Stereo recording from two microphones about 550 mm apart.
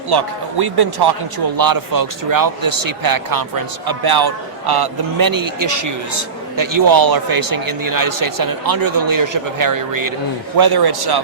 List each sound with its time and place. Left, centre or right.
0.1 s a man's voice: right